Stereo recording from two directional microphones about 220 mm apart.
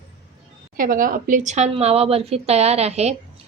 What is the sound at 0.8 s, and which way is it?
A woman's voice, 40° right (ahead or behind).